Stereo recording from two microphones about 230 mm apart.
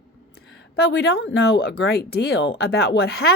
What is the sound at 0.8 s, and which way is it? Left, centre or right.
Speech, left.